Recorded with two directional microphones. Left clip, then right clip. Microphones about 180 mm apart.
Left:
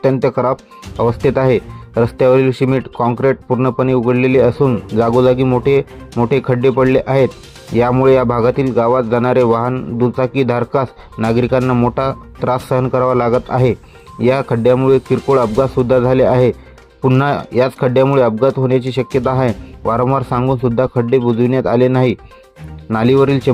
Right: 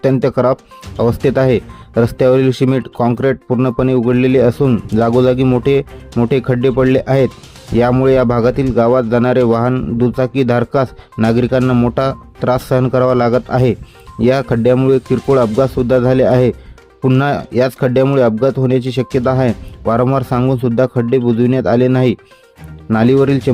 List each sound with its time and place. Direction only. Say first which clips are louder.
0.2 s speech: right 2 dB; 30° right (ahead or behind)